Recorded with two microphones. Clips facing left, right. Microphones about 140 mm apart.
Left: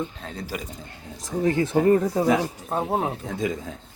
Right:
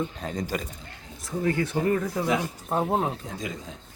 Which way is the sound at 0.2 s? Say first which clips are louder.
Right 3 dB; centre (ahead or behind).